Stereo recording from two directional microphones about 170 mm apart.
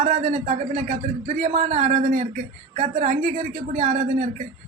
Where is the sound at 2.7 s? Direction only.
40° right (ahead or behind).